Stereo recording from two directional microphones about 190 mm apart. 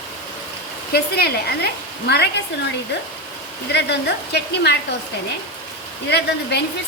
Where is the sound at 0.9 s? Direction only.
55° left (ahead or behind).